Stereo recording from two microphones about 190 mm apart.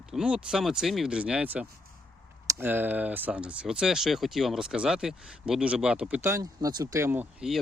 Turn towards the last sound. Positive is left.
turn(degrees=-5)  # may be behind; listen again after turning